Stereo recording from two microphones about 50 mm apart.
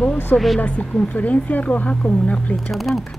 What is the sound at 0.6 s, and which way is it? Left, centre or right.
A woman's voice, left.